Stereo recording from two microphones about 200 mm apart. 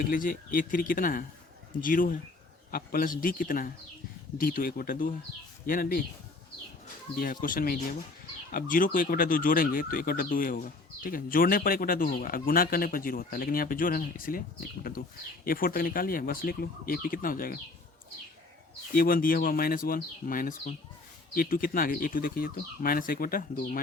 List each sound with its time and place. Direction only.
0.0 s speech: 45° left (ahead or behind)
7.4 s speech: 45° left (ahead or behind)
15.4 s speech: 45° left (ahead or behind)
18.9 s speech: 45° left (ahead or behind)